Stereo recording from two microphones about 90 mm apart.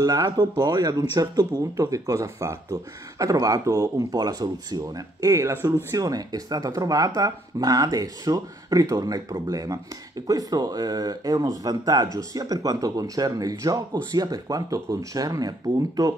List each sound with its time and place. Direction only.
0.0 s speech: 40° right (ahead or behind)
5.9 s speech: 40° right (ahead or behind)